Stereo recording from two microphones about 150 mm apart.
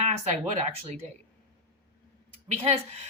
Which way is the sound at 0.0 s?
45° right (ahead or behind).